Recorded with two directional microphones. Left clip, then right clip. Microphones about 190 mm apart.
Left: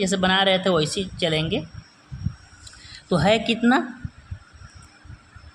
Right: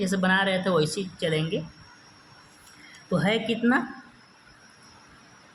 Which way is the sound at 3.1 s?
35° left (ahead or behind).